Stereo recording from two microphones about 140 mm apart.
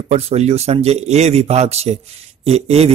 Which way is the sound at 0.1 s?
50° right (ahead or behind).